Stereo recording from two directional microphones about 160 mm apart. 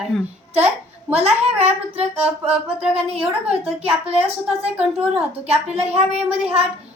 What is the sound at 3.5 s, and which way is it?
Speech, 40° right (ahead or behind).